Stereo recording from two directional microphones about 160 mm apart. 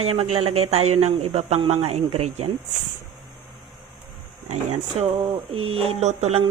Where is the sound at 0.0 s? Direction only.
40° right (ahead or behind).